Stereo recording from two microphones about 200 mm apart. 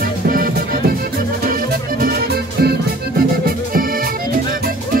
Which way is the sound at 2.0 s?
50° right (ahead or behind).